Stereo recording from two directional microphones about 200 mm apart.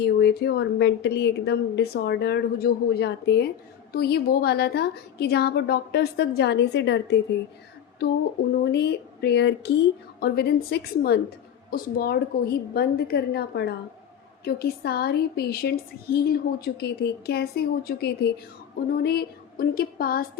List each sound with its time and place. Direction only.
0.0 s a woman's voice: 55° left (ahead or behind)
8.6 s a woman's voice: 55° left (ahead or behind)